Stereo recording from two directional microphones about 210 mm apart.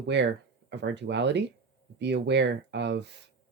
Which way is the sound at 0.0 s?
55° right (ahead or behind).